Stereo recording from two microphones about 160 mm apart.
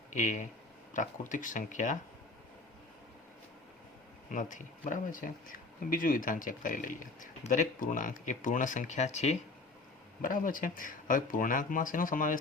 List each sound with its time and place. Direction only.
0.1 s speech: 50° left (ahead or behind)
4.3 s speech: 55° left (ahead or behind)
10.2 s speech: 55° left (ahead or behind)